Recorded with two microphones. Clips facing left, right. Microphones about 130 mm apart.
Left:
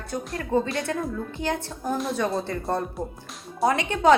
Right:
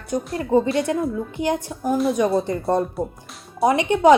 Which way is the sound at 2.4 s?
20° right (ahead or behind).